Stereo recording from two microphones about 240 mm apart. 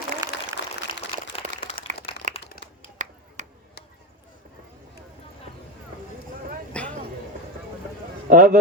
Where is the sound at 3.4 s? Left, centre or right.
Right.